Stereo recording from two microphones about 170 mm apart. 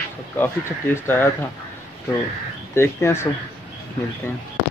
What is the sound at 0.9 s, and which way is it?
Speech, 10° left (ahead or behind).